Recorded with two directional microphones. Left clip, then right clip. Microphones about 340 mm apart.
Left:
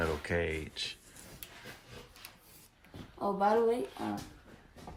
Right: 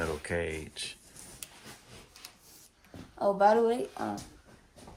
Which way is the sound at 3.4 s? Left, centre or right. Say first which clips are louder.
Right 4 dB; right.